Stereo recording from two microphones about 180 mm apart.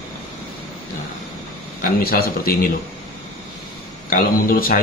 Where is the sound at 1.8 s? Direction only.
55° left (ahead or behind).